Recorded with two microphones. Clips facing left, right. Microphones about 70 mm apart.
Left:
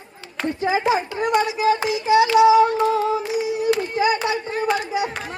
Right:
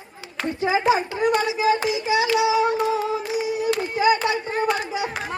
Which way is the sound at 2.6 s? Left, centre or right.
Centre.